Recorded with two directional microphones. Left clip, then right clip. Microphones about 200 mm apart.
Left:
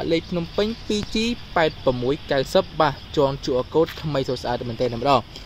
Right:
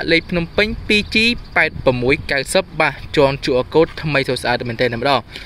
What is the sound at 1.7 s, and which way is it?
Speech, 25° right (ahead or behind).